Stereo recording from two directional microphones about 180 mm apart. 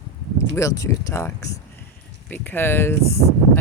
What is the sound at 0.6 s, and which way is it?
Speech, 15° left (ahead or behind).